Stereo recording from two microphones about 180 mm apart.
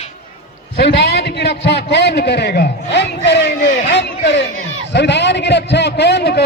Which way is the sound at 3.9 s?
70° left (ahead or behind).